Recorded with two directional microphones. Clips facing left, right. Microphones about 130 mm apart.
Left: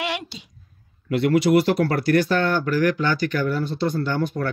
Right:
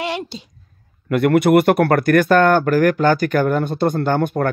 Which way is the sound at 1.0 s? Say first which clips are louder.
Right 4 dB; 55° right (ahead or behind).